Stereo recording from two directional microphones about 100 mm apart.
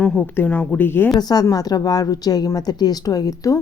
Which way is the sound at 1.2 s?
40° left (ahead or behind).